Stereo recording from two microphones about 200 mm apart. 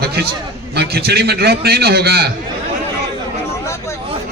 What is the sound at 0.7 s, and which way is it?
A man's voice, 55° right (ahead or behind).